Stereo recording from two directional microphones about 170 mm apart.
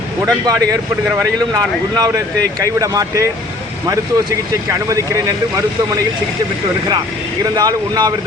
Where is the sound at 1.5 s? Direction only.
25° right (ahead or behind).